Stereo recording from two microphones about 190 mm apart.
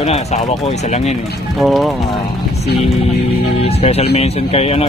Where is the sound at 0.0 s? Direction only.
35° left (ahead or behind).